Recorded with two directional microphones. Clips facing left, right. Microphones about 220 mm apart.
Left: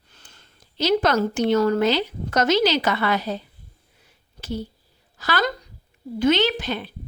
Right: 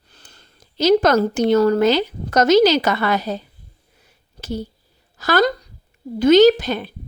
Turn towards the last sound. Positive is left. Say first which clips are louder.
# right 11 dB
turn(degrees=-40)  # may be behind; listen again after turning